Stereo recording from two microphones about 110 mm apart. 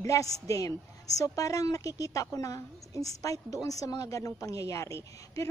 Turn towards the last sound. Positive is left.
turn(degrees=25)  # may be behind; listen again after turning